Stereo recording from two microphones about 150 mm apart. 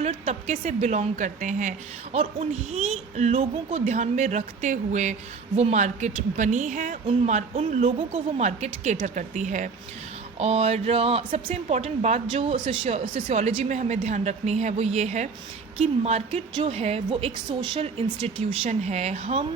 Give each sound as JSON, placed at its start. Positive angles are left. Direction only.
{"t": 0.0, "sound": "a woman's voice", "side_deg": -45}
{"t": 2.1, "sound": "a woman's voice", "side_deg": -45}
{"t": 7.1, "sound": "a woman's voice", "side_deg": -45}
{"t": 18.6, "sound": "a woman's voice", "side_deg": -50}